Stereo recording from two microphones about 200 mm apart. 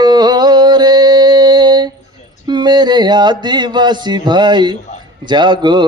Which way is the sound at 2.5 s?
20° right (ahead or behind).